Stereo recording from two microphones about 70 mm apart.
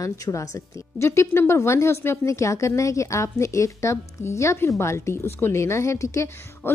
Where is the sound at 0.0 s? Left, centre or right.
Left.